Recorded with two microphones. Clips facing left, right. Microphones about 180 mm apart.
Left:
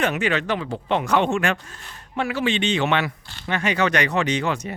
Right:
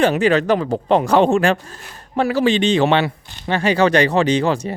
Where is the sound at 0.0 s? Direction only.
35° right (ahead or behind).